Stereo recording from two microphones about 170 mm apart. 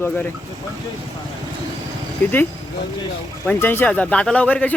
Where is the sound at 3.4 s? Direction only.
10° left (ahead or behind).